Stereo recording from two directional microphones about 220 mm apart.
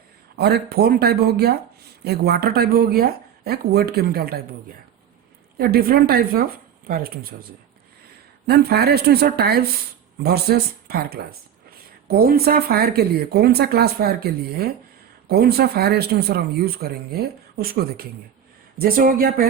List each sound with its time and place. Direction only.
0.3 s speech: 45° right (ahead or behind)
5.5 s speech: 45° right (ahead or behind)
8.4 s speech: 45° right (ahead or behind)